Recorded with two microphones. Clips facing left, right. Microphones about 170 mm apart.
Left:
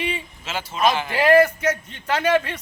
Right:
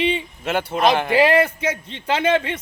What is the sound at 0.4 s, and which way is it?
Speech, 60° right (ahead or behind).